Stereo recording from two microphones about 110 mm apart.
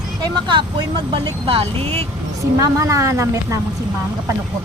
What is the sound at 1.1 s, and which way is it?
Speech, 60° right (ahead or behind).